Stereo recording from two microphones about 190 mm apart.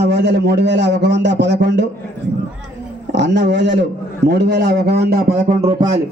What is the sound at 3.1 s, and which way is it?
A man's voice, 65° right (ahead or behind).